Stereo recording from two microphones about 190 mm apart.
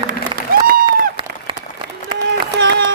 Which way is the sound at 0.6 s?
50° right (ahead or behind).